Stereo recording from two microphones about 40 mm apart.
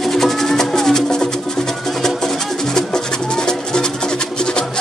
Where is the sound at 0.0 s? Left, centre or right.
Centre.